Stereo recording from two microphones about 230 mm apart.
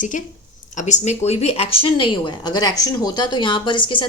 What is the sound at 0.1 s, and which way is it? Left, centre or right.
A woman's voice, left.